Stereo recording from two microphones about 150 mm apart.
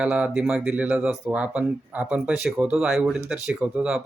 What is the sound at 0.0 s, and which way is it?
Speech, 5° right (ahead or behind).